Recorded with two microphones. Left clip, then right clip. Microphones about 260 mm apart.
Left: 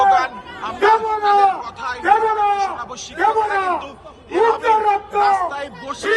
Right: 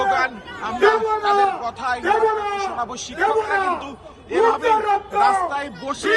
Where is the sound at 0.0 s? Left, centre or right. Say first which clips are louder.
Left 5 dB; centre.